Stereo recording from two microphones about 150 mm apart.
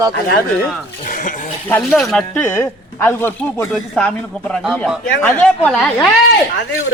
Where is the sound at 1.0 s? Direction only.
60° left (ahead or behind).